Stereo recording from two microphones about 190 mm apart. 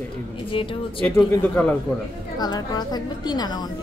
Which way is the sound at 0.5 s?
30° left (ahead or behind).